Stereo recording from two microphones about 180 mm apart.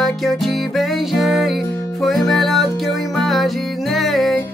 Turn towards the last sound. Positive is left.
turn(degrees=0)  # may be behind; listen again after turning